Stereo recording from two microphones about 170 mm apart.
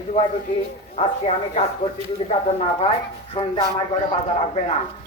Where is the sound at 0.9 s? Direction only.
40° left (ahead or behind).